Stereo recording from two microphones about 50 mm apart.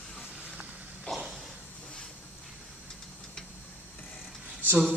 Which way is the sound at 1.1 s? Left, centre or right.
Left.